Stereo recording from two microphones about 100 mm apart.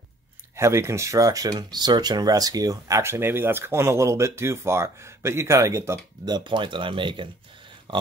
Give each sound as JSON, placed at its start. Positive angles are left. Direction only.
{"t": 0.6, "sound": "speech", "side_deg": -30}
{"t": 6.2, "sound": "speech", "side_deg": -50}
{"t": 7.9, "sound": "dog", "side_deg": -55}